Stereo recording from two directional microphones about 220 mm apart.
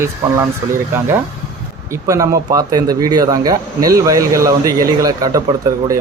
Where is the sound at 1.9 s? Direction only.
15° right (ahead or behind).